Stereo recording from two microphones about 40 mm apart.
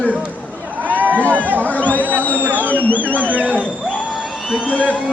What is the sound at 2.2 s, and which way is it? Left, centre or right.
Fireworks, left.